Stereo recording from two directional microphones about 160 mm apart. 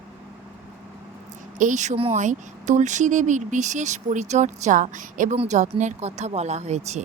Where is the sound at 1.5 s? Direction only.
50° right (ahead or behind).